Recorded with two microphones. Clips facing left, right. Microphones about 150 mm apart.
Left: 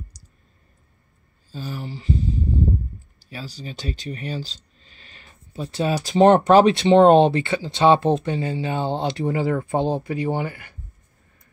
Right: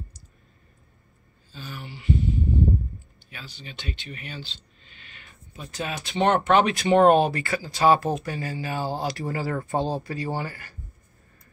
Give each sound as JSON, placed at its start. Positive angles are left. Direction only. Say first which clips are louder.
{"t": 0.2, "sound": "clicking", "louder": "even", "side_deg": 40}
{"t": 1.5, "sound": "speech", "louder": "left 7 dB", "side_deg": 40}
{"t": 3.2, "sound": "speech", "louder": "left 12 dB", "side_deg": 35}